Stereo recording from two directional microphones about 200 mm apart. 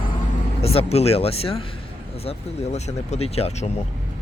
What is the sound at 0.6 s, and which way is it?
A man's voice, 30° left (ahead or behind).